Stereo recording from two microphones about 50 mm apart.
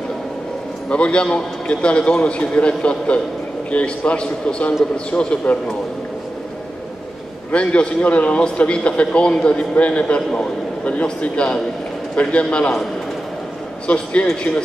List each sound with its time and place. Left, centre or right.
0.8 s a man's voice: left
7.5 s a man's voice: left
13.8 s a man's voice: left